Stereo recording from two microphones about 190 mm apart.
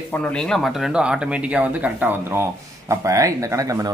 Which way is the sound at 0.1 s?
5° left (ahead or behind).